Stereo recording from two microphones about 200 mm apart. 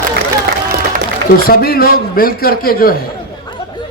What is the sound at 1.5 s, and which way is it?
A man's voice, 50° left (ahead or behind).